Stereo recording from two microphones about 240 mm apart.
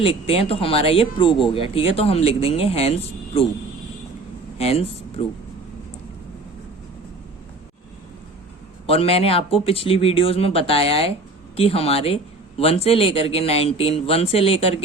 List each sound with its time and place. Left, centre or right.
0.0 s speech: left
4.5 s speech: left
8.9 s speech: left